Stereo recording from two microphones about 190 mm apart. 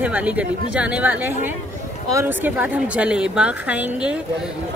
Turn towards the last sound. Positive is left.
turn(degrees=-5)  # may be behind; listen again after turning